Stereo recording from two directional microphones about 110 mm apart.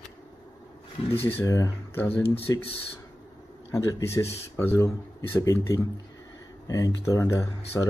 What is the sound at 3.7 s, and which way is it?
Speech, 25° left (ahead or behind).